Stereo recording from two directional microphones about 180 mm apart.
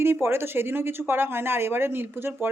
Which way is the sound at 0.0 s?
15° right (ahead or behind).